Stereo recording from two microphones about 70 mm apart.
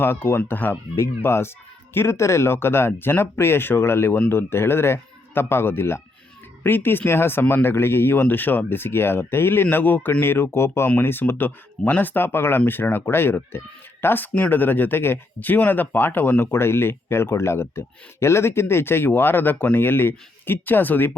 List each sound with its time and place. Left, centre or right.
0.0 s speech: left
0.9 s speech: left